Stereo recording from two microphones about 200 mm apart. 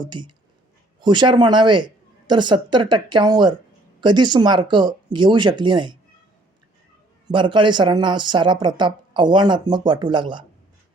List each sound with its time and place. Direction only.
0.0 s speech: 20° right (ahead or behind)
7.3 s speech: 25° right (ahead or behind)